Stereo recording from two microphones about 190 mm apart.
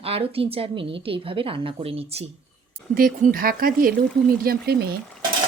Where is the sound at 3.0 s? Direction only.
50° right (ahead or behind).